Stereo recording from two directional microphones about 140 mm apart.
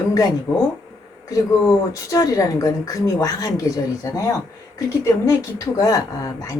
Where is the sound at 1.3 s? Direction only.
25° left (ahead or behind).